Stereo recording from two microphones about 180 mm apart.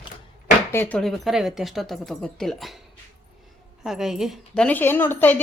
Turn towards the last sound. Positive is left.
turn(degrees=10)  # may be behind; listen again after turning